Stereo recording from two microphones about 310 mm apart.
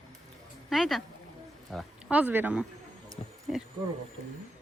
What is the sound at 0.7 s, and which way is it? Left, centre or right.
A woman's voice, centre.